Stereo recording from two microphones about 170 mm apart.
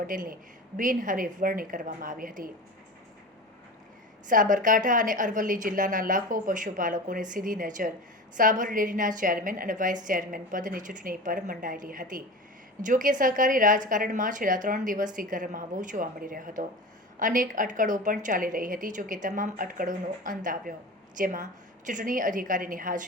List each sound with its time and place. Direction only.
0.1 s a woman's voice: 55° right (ahead or behind)
4.3 s a woman's voice: 50° right (ahead or behind)